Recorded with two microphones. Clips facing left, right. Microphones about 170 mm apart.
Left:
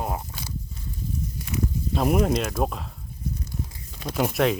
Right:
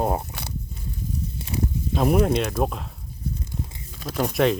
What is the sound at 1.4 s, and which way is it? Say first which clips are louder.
Snake: even; 30° right (ahead or behind).